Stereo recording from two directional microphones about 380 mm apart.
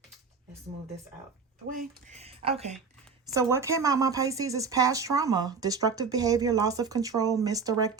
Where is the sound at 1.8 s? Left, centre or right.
Centre.